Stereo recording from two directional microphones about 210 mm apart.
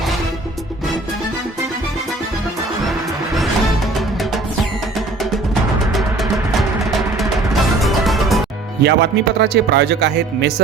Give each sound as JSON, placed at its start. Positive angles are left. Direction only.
{"t": 7.2, "sound": "music", "side_deg": 0}
{"t": 8.8, "sound": "speech", "side_deg": -55}